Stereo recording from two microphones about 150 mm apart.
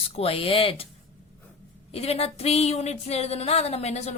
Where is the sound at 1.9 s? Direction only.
40° left (ahead or behind).